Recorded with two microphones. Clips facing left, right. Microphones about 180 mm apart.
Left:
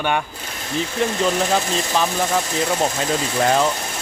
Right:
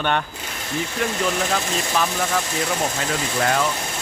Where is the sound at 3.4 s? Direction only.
25° left (ahead or behind).